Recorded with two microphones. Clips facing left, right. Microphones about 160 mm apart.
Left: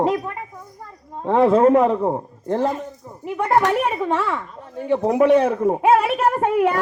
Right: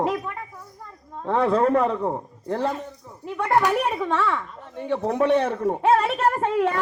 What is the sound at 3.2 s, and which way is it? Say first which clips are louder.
Speech: left 4 dB; 15° left (ahead or behind).